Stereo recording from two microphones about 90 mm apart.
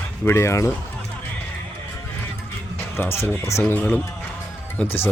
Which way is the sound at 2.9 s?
25° left (ahead or behind).